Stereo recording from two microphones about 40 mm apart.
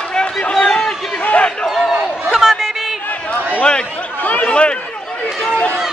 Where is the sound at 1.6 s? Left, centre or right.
Centre.